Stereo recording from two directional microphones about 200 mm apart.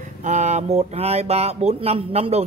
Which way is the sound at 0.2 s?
35° right (ahead or behind).